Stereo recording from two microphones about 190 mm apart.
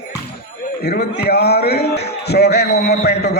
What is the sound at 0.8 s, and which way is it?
A man's voice, 60° left (ahead or behind).